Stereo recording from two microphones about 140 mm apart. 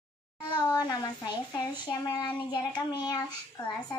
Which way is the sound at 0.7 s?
30° left (ahead or behind).